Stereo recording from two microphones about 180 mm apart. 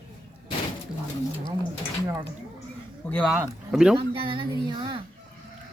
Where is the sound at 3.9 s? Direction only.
30° right (ahead or behind).